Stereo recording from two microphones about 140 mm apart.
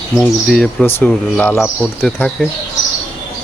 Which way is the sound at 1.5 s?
Centre (ahead or behind).